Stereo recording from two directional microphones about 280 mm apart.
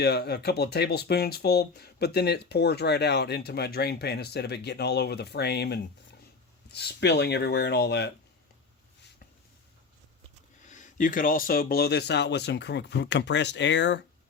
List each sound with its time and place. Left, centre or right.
0.0 s speech: left
10.7 s speech: left